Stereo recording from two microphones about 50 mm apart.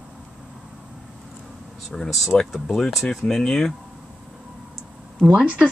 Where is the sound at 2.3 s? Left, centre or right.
Left.